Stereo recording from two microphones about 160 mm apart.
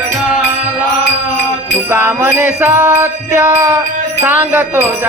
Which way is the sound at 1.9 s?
10° right (ahead or behind).